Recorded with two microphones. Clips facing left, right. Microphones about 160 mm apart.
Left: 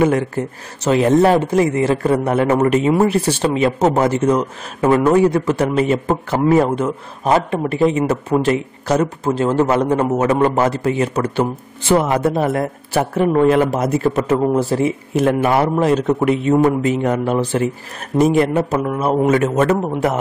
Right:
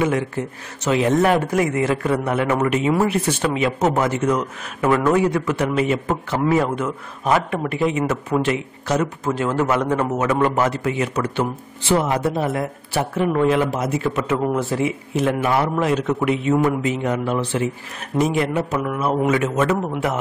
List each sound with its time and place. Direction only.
0.0 s speech: 45° left (ahead or behind)
12.0 s a man's voice: 50° left (ahead or behind)